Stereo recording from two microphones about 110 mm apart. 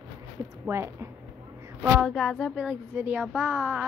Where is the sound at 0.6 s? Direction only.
25° right (ahead or behind).